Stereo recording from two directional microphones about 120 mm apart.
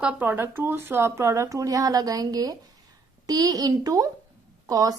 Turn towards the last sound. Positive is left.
turn(degrees=-30)  # may be behind; listen again after turning